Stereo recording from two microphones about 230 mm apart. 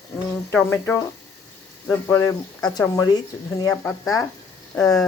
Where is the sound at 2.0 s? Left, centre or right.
Centre.